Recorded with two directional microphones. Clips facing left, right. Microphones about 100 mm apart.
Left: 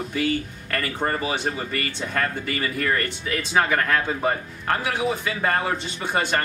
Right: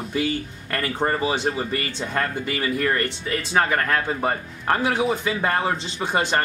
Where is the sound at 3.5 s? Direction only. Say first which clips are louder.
Even; centre (ahead or behind).